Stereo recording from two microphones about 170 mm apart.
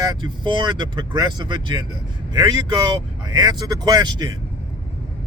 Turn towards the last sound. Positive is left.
turn(degrees=-25)  # may be behind; listen again after turning